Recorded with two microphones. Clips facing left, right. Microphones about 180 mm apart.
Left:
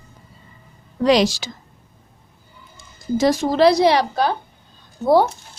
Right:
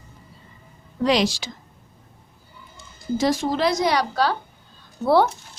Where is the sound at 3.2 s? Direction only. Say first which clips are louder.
Left 6 dB; 40° left (ahead or behind).